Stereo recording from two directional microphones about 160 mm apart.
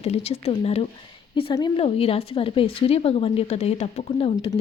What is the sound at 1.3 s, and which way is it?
A woman's voice, 30° left (ahead or behind).